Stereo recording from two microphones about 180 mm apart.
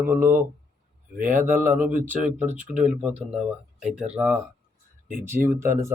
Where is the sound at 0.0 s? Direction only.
15° right (ahead or behind).